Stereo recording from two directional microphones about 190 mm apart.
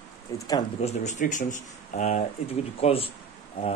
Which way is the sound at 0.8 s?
40° left (ahead or behind).